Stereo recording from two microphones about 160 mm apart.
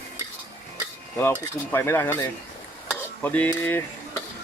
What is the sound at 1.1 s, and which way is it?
Speech, 15° left (ahead or behind).